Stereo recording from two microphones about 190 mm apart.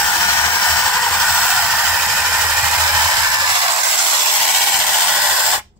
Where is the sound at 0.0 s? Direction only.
5° left (ahead or behind); by 4.1 s 20° right (ahead or behind).